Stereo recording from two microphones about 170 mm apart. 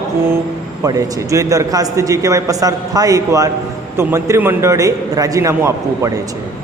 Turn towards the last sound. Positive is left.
turn(degrees=-15)  # may be behind; listen again after turning